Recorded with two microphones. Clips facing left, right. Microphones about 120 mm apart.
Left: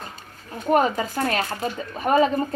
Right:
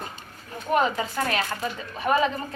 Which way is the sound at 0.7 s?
40° left (ahead or behind).